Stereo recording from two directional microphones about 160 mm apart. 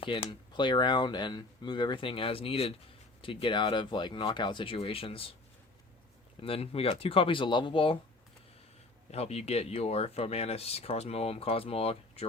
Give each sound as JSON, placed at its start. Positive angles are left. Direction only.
{"t": 0.0, "sound": "speech", "side_deg": 35}
{"t": 6.4, "sound": "speech", "side_deg": 35}
{"t": 9.1, "sound": "speech", "side_deg": 40}